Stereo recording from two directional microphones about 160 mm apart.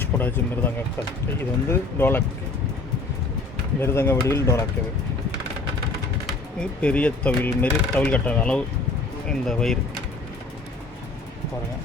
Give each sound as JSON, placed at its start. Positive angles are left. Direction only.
{"t": 0.0, "sound": "speech", "side_deg": 10}
{"t": 3.8, "sound": "speech", "side_deg": 15}
{"t": 6.6, "sound": "speech", "side_deg": 10}